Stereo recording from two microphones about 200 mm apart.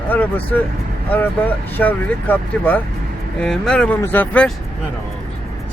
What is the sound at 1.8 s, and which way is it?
Speech, 10° left (ahead or behind).